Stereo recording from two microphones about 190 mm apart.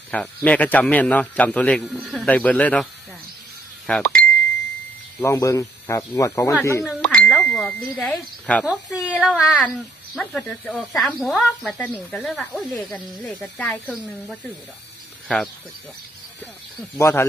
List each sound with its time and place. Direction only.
0.1 s a man's voice: 5° left (ahead or behind)
3.8 s speech: 5° left (ahead or behind)
5.2 s a man's voice: 15° left (ahead or behind)
6.8 s speech: 5° left (ahead or behind)
17.0 s a man's voice: 15° left (ahead or behind)